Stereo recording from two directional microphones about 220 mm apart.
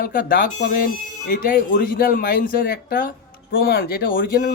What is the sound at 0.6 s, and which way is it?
Speech, 45° left (ahead or behind).